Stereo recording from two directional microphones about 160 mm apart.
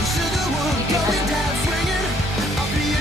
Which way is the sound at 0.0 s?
Centre (ahead or behind).